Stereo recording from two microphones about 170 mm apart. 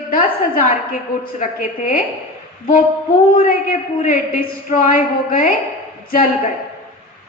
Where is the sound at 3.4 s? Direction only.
50° left (ahead or behind).